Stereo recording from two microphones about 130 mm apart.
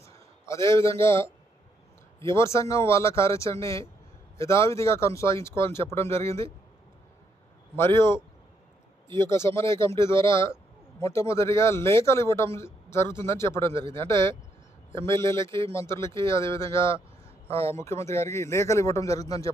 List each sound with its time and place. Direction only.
0.4 s a man's voice: 20° left (ahead or behind)
2.3 s a man's voice: 20° left (ahead or behind)
7.8 s a man's voice: 20° left (ahead or behind)
9.0 s a man's voice: 35° right (ahead or behind)
9.3 s a man's voice: 20° left (ahead or behind)